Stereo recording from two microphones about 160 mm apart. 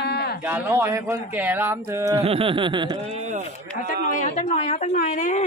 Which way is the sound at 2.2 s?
35° right (ahead or behind).